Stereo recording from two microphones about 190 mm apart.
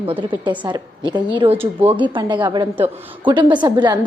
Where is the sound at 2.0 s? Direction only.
25° right (ahead or behind).